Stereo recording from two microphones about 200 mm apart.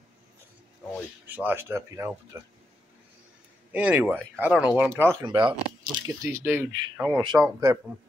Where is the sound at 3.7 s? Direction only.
10° right (ahead or behind).